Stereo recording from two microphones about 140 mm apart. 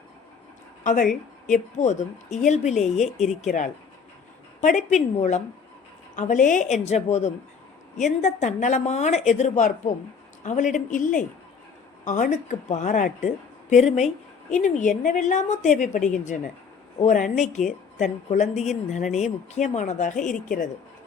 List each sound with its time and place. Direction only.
1.5 s a woman's voice: 60° left (ahead or behind)
3.0 s speech: centre (ahead or behind)
3.4 s a woman's voice: 65° left (ahead or behind)
6.8 s a woman's voice: 50° left (ahead or behind); by 20.7 s 70° left (ahead or behind)